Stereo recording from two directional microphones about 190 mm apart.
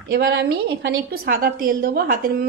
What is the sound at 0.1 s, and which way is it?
A woman's voice, 60° right (ahead or behind).